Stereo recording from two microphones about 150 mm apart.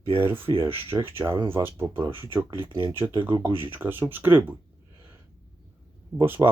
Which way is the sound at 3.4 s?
15° right (ahead or behind).